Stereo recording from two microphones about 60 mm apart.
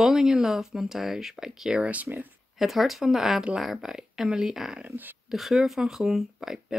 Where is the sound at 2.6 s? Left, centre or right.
Centre.